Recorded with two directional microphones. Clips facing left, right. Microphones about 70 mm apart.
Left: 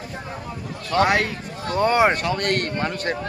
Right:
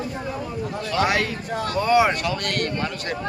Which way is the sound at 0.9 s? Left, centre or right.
Left.